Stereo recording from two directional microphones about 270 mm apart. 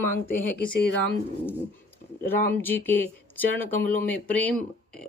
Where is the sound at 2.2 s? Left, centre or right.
Centre.